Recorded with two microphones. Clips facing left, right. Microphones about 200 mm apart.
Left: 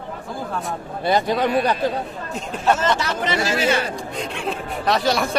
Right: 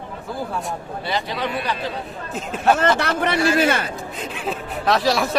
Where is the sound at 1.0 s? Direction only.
50° left (ahead or behind).